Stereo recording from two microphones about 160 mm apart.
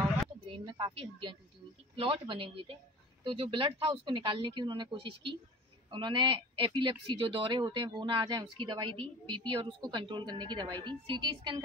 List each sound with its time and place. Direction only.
0.5 s a woman's voice: 30° right (ahead or behind)